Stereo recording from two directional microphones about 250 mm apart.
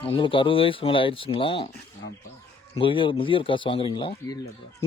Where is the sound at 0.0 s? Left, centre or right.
Left.